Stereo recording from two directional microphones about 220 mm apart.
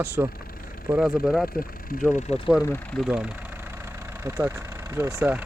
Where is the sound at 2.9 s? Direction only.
Centre (ahead or behind).